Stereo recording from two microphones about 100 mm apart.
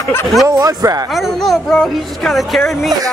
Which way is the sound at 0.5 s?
40° right (ahead or behind).